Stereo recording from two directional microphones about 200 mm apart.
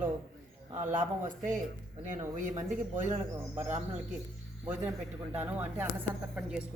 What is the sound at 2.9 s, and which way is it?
Speech, 40° right (ahead or behind).